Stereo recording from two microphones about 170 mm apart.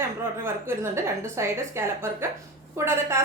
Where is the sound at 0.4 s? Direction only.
15° right (ahead or behind).